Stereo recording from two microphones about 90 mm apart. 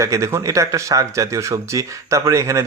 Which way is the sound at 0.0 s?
35° right (ahead or behind).